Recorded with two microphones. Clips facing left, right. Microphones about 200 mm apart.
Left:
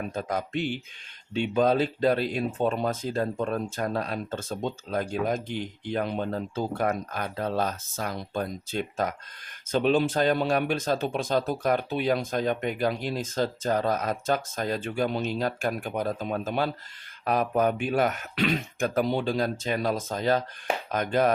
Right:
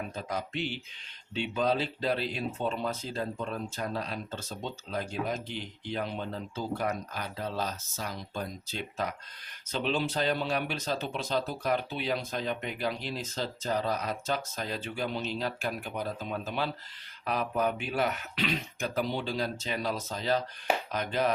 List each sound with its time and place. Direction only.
0.1 s speech: 50° left (ahead or behind)